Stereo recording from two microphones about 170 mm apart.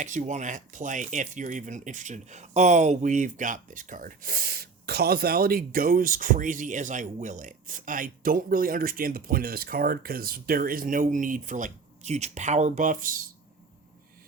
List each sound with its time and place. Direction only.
0.0 s speech: 45° right (ahead or behind)